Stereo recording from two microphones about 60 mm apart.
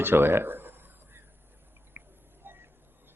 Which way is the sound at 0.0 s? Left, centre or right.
Right.